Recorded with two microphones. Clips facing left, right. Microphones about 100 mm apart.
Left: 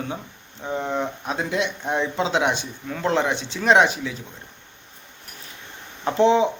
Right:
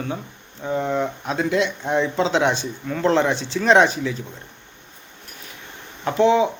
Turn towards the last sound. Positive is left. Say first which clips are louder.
# right 1 dB
turn(degrees=30)  # may be behind; listen again after turning